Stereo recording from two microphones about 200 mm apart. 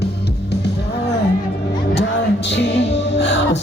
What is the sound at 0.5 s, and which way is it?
Music, 55° left (ahead or behind).